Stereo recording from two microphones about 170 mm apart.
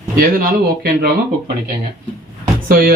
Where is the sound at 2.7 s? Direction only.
60° right (ahead or behind).